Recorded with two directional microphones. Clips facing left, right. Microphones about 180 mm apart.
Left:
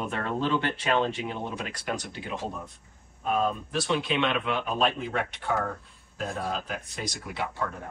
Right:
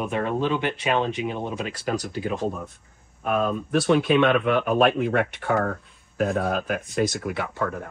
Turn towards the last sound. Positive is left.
turn(degrees=-55)  # may be behind; listen again after turning